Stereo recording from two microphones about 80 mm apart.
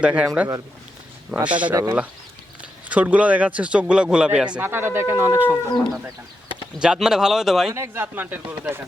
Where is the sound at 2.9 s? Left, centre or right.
Centre.